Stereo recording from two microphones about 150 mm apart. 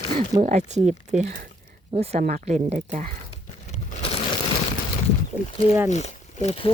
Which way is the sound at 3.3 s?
50° left (ahead or behind).